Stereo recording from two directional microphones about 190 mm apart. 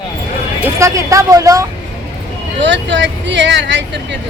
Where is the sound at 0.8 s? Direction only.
15° right (ahead or behind).